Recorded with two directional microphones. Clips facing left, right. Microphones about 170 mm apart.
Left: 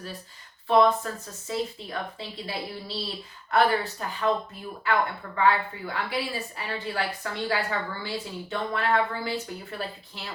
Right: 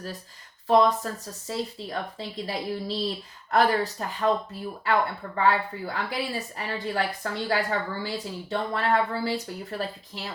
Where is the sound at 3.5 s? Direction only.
40° right (ahead or behind).